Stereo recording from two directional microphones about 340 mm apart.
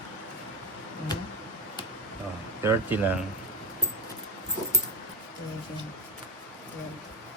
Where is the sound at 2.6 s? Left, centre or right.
Centre.